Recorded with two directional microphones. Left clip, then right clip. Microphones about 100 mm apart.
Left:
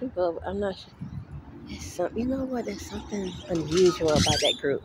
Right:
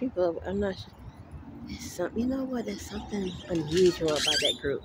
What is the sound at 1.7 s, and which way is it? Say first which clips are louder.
Speech: left 3 dB; 20° right (ahead or behind).